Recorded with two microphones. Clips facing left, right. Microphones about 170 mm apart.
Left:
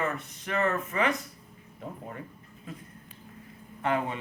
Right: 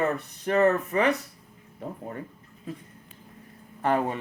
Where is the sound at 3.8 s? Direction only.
40° right (ahead or behind).